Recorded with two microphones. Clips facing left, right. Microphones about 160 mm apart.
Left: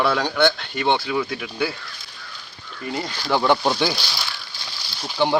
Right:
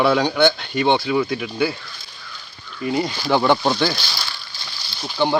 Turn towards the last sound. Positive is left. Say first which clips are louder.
# right 1 dB
turn(degrees=5)  # may be behind; listen again after turning